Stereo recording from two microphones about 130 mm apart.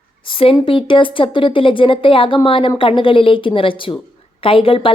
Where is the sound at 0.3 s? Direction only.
45° left (ahead or behind).